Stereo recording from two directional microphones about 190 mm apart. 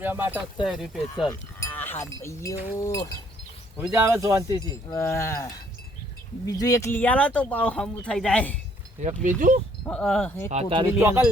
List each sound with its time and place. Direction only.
0.0 s speech: 10° right (ahead or behind)
1.3 s livestock: 10° left (ahead or behind)
2.7 s speech: 15° left (ahead or behind)
3.8 s speech: 10° right (ahead or behind)
4.6 s speech: 20° left (ahead or behind)
9.2 s speech: 45° right (ahead or behind)
9.8 s speech: 5° left (ahead or behind)
10.5 s speech: 30° right (ahead or behind)
10.8 s speech: 10° right (ahead or behind)